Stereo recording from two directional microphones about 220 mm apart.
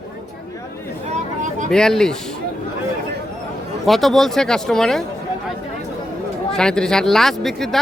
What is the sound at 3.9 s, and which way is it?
A man's voice, centre (ahead or behind).